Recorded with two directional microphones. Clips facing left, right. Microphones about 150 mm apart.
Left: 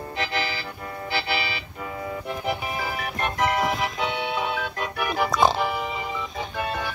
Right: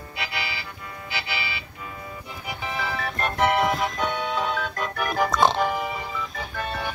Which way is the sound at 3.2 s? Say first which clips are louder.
Right 2 dB; 5° left (ahead or behind).